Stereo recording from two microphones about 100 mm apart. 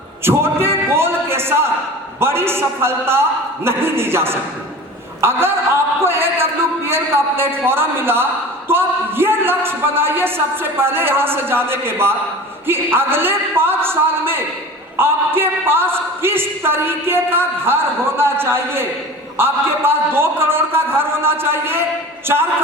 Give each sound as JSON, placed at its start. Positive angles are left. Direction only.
{"t": 0.3, "sound": "singing", "side_deg": -25}
{"t": 0.9, "sound": "music", "side_deg": -25}
{"t": 2.2, "sound": "a man's voice", "side_deg": -25}
{"t": 6.1, "sound": "a sound", "side_deg": -25}
{"t": 7.5, "sound": "speech", "side_deg": -25}